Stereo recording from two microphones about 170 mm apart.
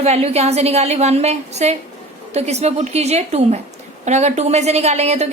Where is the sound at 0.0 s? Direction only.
40° right (ahead or behind).